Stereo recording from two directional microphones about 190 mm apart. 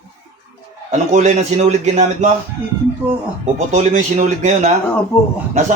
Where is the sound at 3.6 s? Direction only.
35° right (ahead or behind).